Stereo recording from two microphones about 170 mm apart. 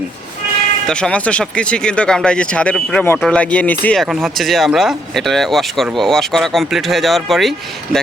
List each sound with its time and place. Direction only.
0.9 s speech: 5° left (ahead or behind)